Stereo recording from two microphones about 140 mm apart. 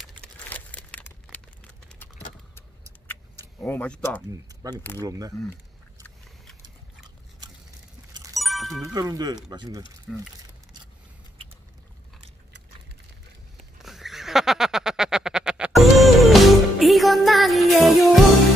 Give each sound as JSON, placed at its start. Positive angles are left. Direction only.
{"t": 0.2, "sound": "crumpling", "side_deg": 10}
{"t": 3.1, "sound": "vehicle", "side_deg": 15}
{"t": 4.3, "sound": "speech", "side_deg": -25}
{"t": 8.4, "sound": "music", "side_deg": 0}
{"t": 8.8, "sound": "speech", "side_deg": -25}
{"t": 10.1, "sound": "speech", "side_deg": 0}
{"t": 13.8, "sound": "a sound", "side_deg": 0}